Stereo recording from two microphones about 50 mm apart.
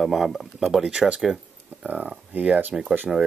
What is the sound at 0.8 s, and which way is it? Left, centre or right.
Speech, right.